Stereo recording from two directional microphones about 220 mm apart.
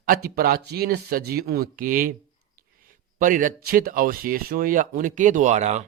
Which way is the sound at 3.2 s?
35° right (ahead or behind).